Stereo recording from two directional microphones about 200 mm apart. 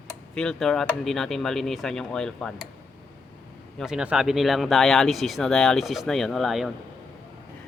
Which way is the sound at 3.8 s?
5° right (ahead or behind).